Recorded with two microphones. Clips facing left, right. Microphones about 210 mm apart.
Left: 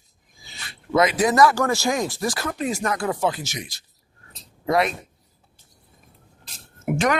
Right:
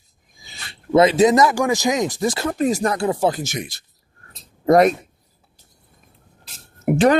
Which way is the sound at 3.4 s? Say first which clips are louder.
Right 6 dB; 55° right (ahead or behind).